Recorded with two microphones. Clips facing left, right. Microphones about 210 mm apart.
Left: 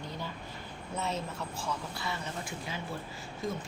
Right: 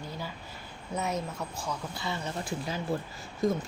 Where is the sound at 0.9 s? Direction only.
15° right (ahead or behind).